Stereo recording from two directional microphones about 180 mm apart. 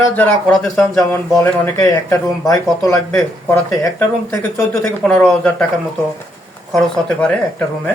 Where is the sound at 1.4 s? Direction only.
15° left (ahead or behind).